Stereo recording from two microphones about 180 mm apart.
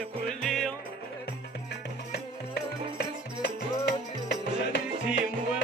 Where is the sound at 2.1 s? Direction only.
70° left (ahead or behind).